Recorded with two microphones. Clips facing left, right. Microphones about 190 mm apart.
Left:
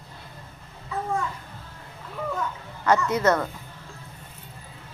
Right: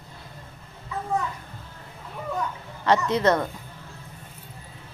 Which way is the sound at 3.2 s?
15° right (ahead or behind).